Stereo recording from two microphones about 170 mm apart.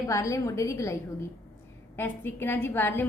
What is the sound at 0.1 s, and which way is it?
Speech, 20° left (ahead or behind).